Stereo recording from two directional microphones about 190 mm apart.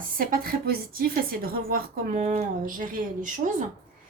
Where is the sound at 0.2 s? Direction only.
50° right (ahead or behind).